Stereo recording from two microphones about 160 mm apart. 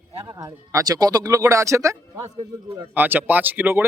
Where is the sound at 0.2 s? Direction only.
20° right (ahead or behind).